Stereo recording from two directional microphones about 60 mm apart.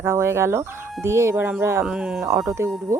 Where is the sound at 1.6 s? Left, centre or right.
Right.